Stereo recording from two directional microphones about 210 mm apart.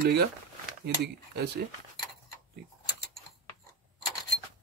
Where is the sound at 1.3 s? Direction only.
50° right (ahead or behind).